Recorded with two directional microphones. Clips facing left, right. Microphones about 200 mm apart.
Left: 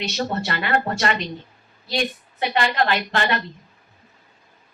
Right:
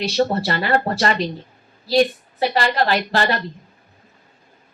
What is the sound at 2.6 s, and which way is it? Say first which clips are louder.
Speech: right 1 dB; 35° right (ahead or behind).